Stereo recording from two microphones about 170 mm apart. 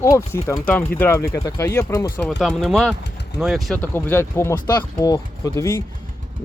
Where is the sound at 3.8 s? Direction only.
15° left (ahead or behind).